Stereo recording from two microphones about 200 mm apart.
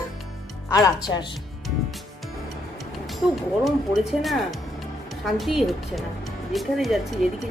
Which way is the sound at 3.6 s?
Centre (ahead or behind).